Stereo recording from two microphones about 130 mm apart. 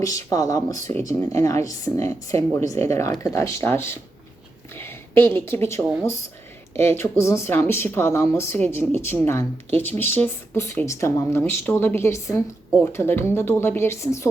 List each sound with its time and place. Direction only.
0.0 s speech: 25° left (ahead or behind)